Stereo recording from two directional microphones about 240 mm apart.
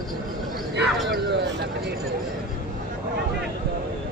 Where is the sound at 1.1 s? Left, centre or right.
Right.